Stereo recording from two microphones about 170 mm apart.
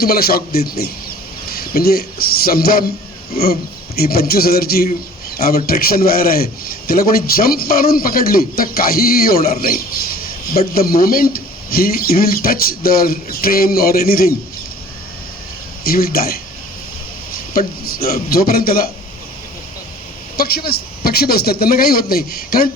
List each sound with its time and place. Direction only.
0.0 s a man's voice: 60° left (ahead or behind)
15.8 s a man's voice: 60° left (ahead or behind)
17.9 s a man's voice: 60° left (ahead or behind)
20.3 s a man's voice: 60° left (ahead or behind)